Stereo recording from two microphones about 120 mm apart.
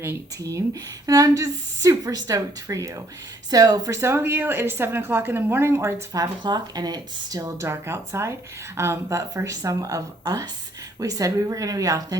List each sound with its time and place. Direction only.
0.0 s speech: 25° right (ahead or behind)
6.4 s speech: 35° right (ahead or behind)